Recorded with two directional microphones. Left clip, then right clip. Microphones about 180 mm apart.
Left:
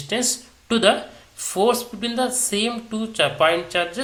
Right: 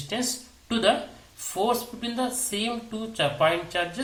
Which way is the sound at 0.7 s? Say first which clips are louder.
Left 5 dB; 20° left (ahead or behind).